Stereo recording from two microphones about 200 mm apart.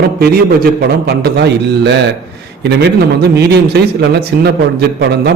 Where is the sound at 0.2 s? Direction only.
50° right (ahead or behind).